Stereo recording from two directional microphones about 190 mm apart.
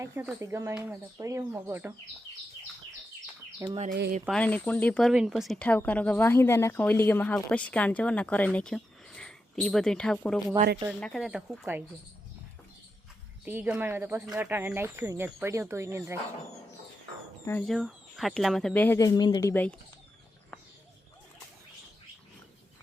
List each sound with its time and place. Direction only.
0.0 s speech: 15° right (ahead or behind)
3.6 s speech: 15° right (ahead or behind)
4.3 s speech: 5° left (ahead or behind)
13.4 s speech: 10° right (ahead or behind)
17.4 s speech: 10° left (ahead or behind)
17.7 s speech: centre (ahead or behind)